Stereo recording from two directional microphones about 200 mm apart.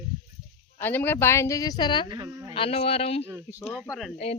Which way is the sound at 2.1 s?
20° right (ahead or behind).